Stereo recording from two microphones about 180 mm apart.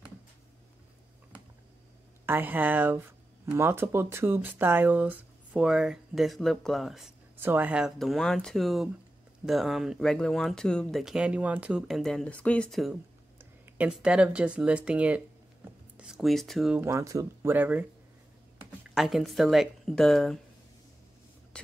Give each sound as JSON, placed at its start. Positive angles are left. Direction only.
{"t": 2.2, "sound": "speech", "side_deg": -10}
{"t": 7.3, "sound": "speech", "side_deg": -10}
{"t": 16.8, "sound": "speech", "side_deg": -15}
{"t": 18.9, "sound": "speech", "side_deg": 0}